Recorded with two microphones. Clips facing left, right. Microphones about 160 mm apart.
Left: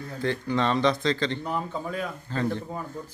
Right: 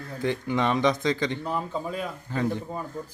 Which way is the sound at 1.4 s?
5° right (ahead or behind).